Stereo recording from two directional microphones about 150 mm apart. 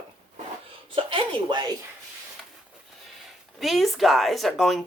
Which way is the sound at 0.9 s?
35° right (ahead or behind).